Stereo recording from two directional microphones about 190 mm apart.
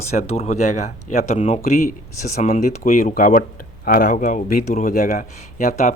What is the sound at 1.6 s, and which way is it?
Speech, 45° left (ahead or behind).